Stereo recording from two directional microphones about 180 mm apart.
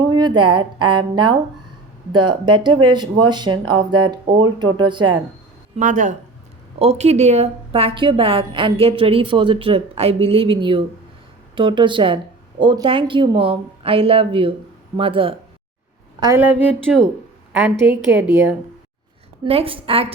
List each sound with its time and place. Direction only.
0.1 s speech: 25° right (ahead or behind)
5.7 s a woman's voice: 45° right (ahead or behind)
16.2 s a woman's voice: 15° right (ahead or behind)
19.5 s a woman's voice: 30° right (ahead or behind)